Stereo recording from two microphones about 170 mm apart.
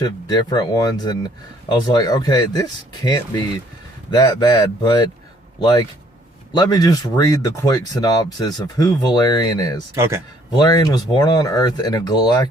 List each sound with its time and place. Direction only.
0.3 s speech: 25° left (ahead or behind)
9.9 s speech: 15° right (ahead or behind)
10.5 s speech: 25° left (ahead or behind)